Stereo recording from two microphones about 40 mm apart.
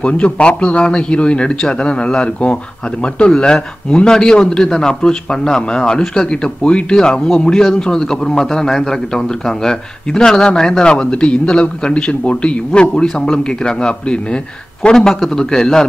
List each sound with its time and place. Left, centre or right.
0.0 s a man's voice: left; by 15.9 s centre